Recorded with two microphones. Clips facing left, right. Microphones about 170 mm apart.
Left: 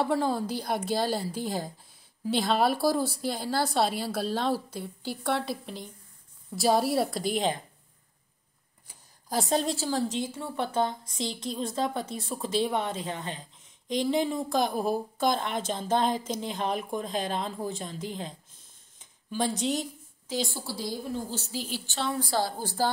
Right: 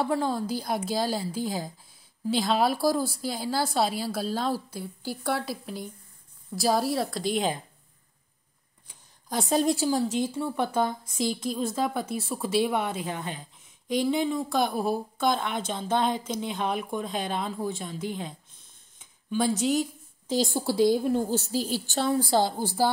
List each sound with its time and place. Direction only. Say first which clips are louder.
0.0 s speech: even; centre (ahead or behind)
8.8 s a sound: even; centre (ahead or behind)
9.6 s a woman's voice: right 4 dB; 10° right (ahead or behind)
17.1 s speech: left 2 dB; 40° left (ahead or behind)
17.4 s speech: right 2 dB; 5° right (ahead or behind)
19.3 s speech: right 4 dB; 5° right (ahead or behind)
20.6 s a woman's voice: right 12 dB; 60° right (ahead or behind); by 22.1 s 40° right (ahead or behind)
22.2 s a woman's voice: right 4 dB; 25° right (ahead or behind)
22.6 s a woman's voice: right 3 dB; 10° right (ahead or behind)